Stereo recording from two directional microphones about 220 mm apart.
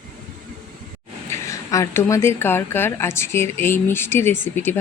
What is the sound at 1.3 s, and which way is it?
A woman's voice, 15° left (ahead or behind).